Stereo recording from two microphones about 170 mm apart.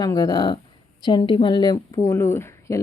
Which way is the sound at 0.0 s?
20° left (ahead or behind).